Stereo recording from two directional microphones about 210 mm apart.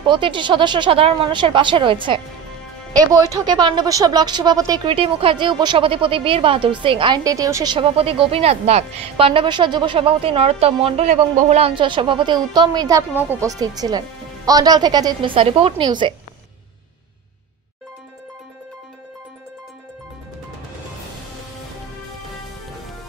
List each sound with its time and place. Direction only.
0.0 s a woman's voice: 25° right (ahead or behind)